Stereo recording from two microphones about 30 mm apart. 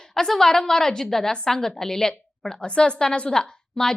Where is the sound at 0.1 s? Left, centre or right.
Centre.